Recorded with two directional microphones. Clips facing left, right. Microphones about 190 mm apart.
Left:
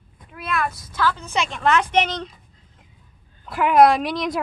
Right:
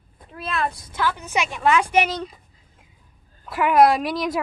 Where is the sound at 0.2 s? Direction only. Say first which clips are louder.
Even; 30° right (ahead or behind).